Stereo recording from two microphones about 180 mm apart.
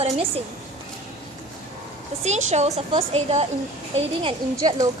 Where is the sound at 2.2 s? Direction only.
40° right (ahead or behind).